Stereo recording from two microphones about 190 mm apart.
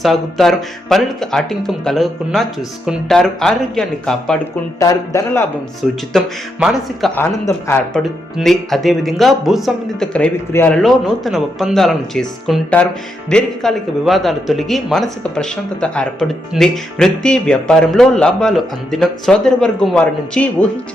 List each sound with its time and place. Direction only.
0.0 s speech: centre (ahead or behind)
4.8 s speech: 15° left (ahead or behind)
5.8 s speech: centre (ahead or behind)
7.2 s speech: 10° left (ahead or behind)
8.4 s speech: centre (ahead or behind)